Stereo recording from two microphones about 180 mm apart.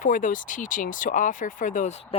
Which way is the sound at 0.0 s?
45° left (ahead or behind).